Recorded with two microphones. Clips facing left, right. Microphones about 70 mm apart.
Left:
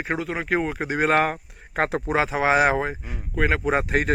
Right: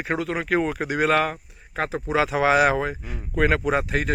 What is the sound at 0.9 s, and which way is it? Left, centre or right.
Speech, left.